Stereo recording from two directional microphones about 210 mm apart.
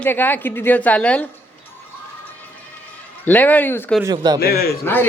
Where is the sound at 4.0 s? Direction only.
20° right (ahead or behind).